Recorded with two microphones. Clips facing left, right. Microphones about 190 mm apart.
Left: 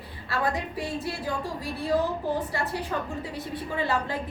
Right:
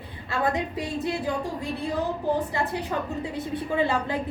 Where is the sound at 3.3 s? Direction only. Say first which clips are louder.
Right 7 dB; 20° right (ahead or behind).